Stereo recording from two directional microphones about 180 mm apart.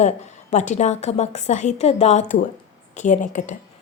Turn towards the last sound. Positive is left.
turn(degrees=45)  # may be behind; listen again after turning